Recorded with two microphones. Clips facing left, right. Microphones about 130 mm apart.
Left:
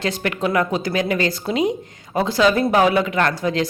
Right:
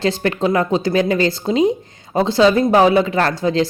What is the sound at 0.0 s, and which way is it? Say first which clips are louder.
Speech: right 4 dB; 30° right (ahead or behind).